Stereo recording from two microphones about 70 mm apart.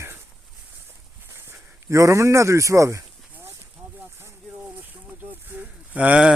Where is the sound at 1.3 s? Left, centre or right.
Right.